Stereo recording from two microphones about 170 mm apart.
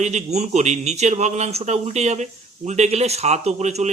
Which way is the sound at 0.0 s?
40° right (ahead or behind).